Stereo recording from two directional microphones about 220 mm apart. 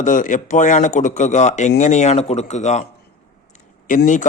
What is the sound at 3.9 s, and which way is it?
Speech, 35° left (ahead or behind).